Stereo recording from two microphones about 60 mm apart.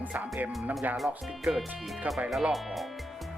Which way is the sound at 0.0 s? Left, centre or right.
Right.